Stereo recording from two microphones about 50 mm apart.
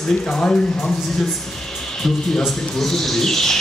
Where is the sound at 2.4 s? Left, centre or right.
Centre.